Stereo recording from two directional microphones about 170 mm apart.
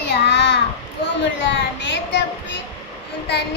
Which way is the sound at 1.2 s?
90° left.